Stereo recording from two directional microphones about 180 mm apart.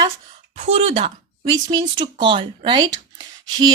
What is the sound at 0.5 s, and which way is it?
Speech, 35° right (ahead or behind).